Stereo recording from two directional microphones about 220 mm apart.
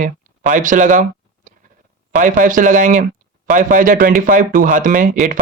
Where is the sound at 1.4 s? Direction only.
35° right (ahead or behind).